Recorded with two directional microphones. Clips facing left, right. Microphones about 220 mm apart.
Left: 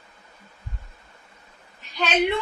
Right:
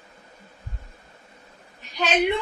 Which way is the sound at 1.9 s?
15° right (ahead or behind).